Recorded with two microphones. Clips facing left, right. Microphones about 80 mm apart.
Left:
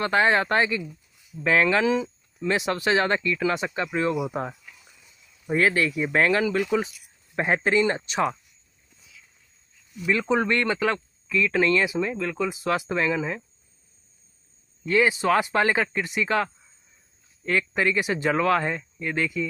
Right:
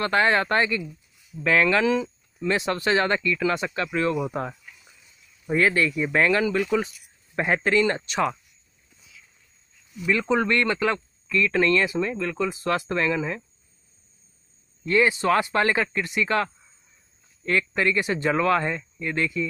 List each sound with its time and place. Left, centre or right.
0.0 s speech: centre
10.0 s speech: centre
14.9 s speech: centre